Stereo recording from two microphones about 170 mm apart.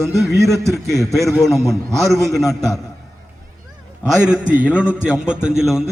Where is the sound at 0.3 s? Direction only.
15° right (ahead or behind).